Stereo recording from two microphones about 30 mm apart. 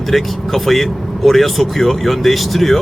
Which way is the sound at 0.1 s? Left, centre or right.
Centre.